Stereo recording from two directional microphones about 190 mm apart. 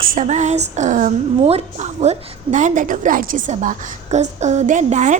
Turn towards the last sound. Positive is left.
turn(degrees=-40)  # may be behind; listen again after turning